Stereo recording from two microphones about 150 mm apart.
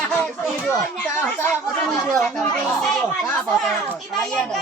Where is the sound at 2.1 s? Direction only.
5° left (ahead or behind).